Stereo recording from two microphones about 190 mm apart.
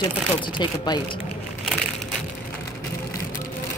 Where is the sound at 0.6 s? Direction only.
25° left (ahead or behind).